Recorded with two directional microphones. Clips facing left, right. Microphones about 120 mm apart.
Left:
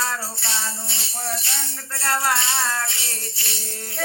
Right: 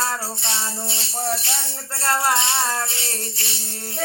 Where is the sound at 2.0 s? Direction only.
30° right (ahead or behind).